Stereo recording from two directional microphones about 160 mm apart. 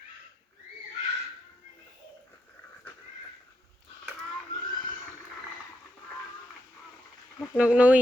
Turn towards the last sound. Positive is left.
turn(degrees=-10)  # may be behind; listen again after turning